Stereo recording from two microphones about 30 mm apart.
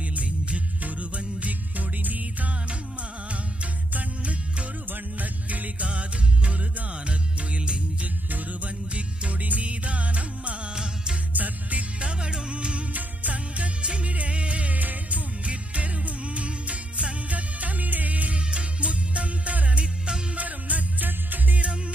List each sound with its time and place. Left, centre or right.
0.8 s music: right
4.2 s music: right
5.2 s music: right
5.9 s music: right
8.3 s music: right
10.7 s music: right
11.3 s music: right
12.0 s music: right
12.9 s music: right
13.8 s music: right
14.8 s music: right
15.4 s music: right
18.5 s music: right
20.3 s music: right